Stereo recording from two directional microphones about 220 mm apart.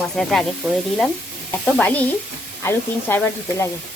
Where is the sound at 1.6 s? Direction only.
5° left (ahead or behind).